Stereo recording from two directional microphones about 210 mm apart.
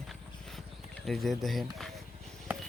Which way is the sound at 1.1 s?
Centre (ahead or behind).